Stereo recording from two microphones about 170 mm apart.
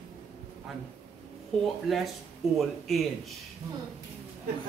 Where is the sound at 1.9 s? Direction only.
Centre (ahead or behind).